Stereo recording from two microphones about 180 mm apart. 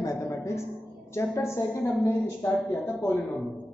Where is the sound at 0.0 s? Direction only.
20° left (ahead or behind).